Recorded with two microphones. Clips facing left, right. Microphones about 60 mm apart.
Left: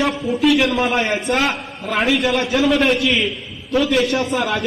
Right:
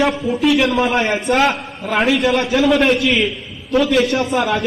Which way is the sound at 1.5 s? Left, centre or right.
Centre.